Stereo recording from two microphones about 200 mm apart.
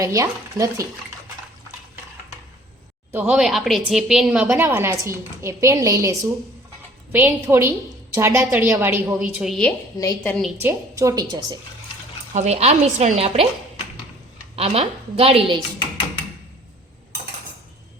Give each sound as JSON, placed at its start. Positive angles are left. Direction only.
{"t": 0.0, "sound": "a woman's voice", "side_deg": -15}
{"t": 3.1, "sound": "a woman's voice", "side_deg": -10}
{"t": 10.0, "sound": "a woman's voice", "side_deg": 15}
{"t": 10.6, "sound": "a woman's voice", "side_deg": -15}
{"t": 12.3, "sound": "speech", "side_deg": -35}
{"t": 14.5, "sound": "a woman's voice", "side_deg": -30}